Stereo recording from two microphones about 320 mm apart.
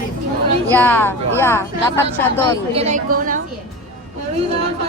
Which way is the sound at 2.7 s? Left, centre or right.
Right.